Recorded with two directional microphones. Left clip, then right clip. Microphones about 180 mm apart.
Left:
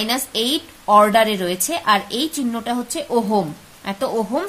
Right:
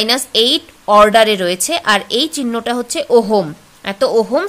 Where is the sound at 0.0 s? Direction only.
35° right (ahead or behind).